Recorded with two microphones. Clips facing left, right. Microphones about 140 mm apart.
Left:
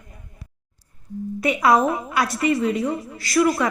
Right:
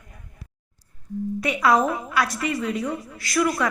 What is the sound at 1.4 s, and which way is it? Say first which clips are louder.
Speech: left 3 dB; 10° left (ahead or behind).